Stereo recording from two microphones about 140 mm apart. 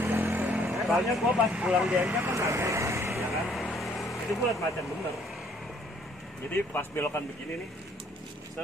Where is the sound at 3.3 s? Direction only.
Centre (ahead or behind).